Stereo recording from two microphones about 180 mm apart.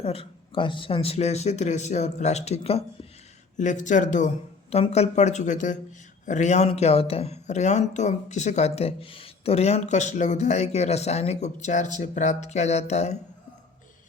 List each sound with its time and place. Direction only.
0.0 s speech: 30° left (ahead or behind)
3.6 s speech: 45° left (ahead or behind)